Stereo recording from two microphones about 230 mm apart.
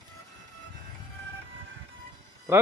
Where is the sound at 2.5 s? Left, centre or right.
Centre.